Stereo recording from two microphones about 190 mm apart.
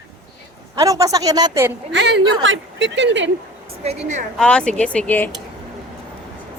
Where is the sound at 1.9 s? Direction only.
75° right (ahead or behind).